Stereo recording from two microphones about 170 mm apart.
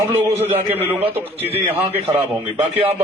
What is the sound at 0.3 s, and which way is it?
Speech, 35° right (ahead or behind).